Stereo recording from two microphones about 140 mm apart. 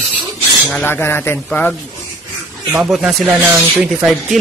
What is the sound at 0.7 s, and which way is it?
Speech, 10° left (ahead or behind).